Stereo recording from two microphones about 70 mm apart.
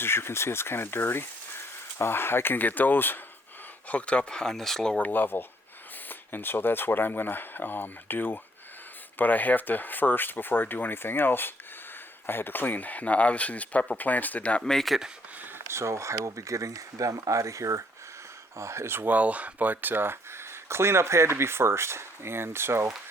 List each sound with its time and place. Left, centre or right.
0.0 s speech: left
3.8 s speech: centre
4.9 s speech: left
14.6 s speech: centre
15.4 s speech: right